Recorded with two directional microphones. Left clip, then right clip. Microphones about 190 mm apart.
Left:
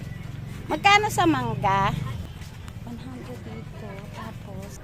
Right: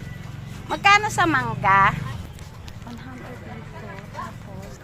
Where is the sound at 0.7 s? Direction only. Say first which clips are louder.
Right 2 dB; 35° left (ahead or behind).